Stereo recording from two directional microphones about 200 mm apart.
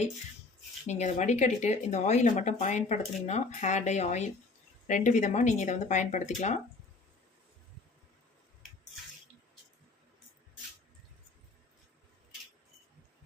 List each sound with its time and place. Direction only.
0.9 s speech: 35° left (ahead or behind)